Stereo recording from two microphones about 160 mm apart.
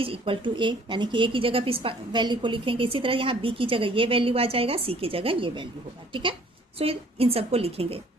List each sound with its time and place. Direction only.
0.0 s a woman's voice: 35° right (ahead or behind)
6.7 s a woman's voice: 35° right (ahead or behind)